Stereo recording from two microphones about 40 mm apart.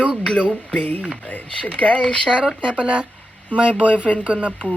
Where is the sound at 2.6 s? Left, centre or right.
Right.